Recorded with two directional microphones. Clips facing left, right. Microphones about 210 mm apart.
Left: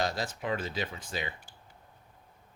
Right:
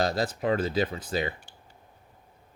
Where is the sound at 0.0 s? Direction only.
35° right (ahead or behind).